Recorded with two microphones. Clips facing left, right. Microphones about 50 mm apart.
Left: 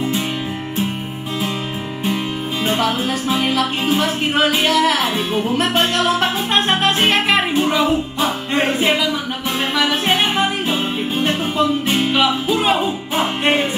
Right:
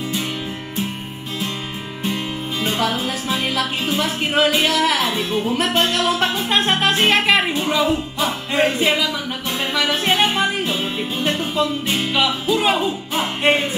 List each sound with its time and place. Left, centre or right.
2.8 s music: centre
5.0 s music: centre